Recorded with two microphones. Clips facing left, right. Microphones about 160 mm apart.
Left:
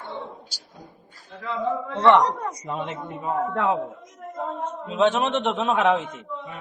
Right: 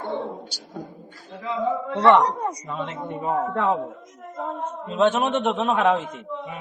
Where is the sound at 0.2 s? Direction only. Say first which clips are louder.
Right 6 dB; 25° right (ahead or behind).